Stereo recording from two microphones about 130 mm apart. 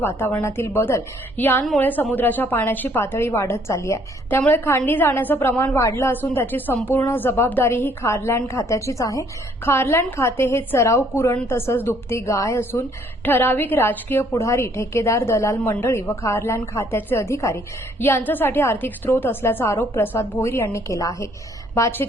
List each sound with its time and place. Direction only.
0.2 s a woman's voice: 15° left (ahead or behind)